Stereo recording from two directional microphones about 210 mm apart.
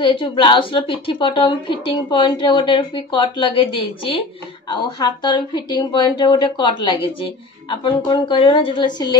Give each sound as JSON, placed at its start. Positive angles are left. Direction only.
{"t": 0.0, "sound": "a woman's voice", "side_deg": 25}